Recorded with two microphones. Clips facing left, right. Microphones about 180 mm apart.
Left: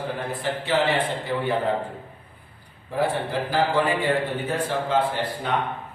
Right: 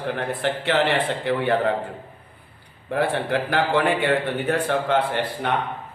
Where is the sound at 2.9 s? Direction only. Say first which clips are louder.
Right 2 dB; 70° right (ahead or behind).